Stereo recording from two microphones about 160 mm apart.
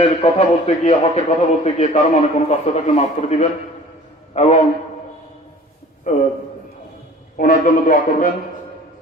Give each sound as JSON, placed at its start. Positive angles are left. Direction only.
{"t": 0.1, "sound": "a man's voice", "side_deg": 50}
{"t": 6.1, "sound": "a man's voice", "side_deg": 50}
{"t": 7.3, "sound": "a man's voice", "side_deg": 60}